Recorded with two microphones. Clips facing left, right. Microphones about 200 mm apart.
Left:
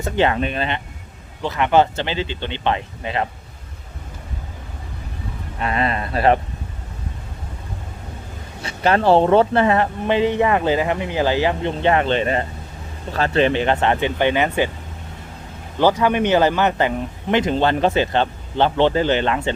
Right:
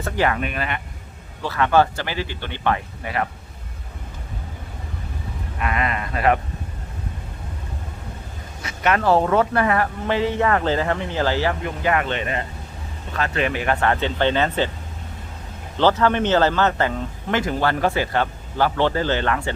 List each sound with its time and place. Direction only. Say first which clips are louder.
0.0 s speech: left 3 dB; 25° left (ahead or behind)
5.5 s a sound: left 3 dB; 30° left (ahead or behind)
8.6 s speech: left 3 dB; 30° left (ahead or behind); by 14.7 s 15° left (ahead or behind)
15.8 s speech: left 1 dB; 10° left (ahead or behind)